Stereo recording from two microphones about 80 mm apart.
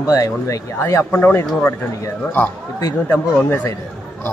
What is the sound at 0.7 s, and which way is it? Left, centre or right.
A man's voice, left.